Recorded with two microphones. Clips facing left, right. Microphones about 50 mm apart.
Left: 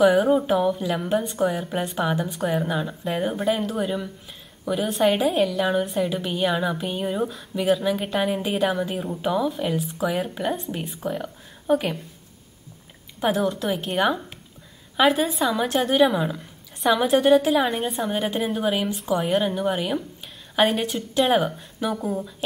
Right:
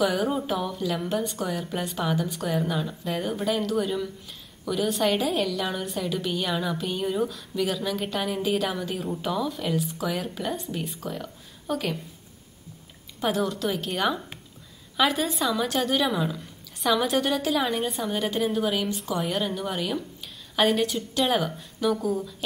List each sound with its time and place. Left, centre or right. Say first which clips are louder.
0.0 s a woman's voice: left 7 dB; centre
13.2 s a woman's voice: left 3 dB; centre